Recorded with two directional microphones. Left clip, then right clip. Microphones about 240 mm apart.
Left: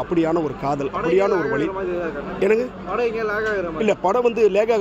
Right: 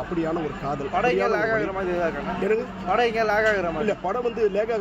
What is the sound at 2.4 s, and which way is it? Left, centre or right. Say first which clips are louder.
Speech: left 6 dB; left.